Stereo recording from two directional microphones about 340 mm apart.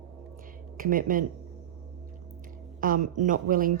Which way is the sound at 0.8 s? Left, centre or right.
Right.